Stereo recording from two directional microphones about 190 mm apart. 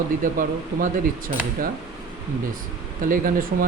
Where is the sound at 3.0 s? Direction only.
45° right (ahead or behind).